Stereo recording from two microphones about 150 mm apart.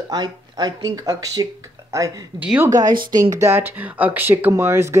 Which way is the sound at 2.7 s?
25° right (ahead or behind).